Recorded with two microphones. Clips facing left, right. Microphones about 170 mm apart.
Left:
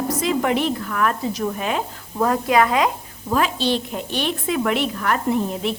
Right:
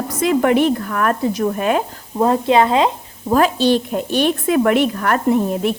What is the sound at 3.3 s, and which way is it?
A woman's voice, 45° right (ahead or behind).